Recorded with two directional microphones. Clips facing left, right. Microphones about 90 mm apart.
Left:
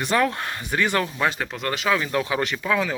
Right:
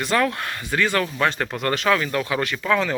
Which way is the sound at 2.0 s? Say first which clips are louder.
Even; 20° left (ahead or behind).